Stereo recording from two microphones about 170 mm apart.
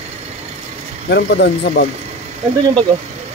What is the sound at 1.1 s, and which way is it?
Speech, 75° left (ahead or behind).